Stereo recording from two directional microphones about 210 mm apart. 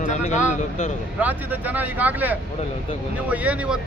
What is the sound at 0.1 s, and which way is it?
Speech, 35° left (ahead or behind).